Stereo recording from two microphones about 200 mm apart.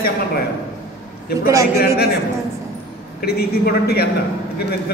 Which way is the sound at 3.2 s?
50° left (ahead or behind).